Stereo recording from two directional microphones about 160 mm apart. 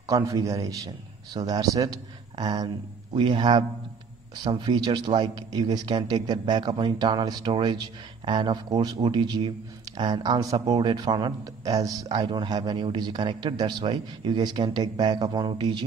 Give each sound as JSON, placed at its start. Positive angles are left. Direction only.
{"t": 0.0, "sound": "a man's voice", "side_deg": -20}